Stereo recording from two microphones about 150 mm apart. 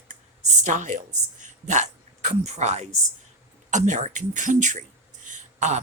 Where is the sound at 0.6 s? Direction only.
55° right (ahead or behind).